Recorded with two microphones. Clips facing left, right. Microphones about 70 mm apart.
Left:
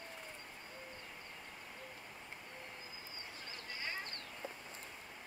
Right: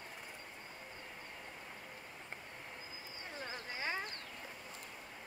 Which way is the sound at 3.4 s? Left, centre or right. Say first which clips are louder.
Right 4 dB; right.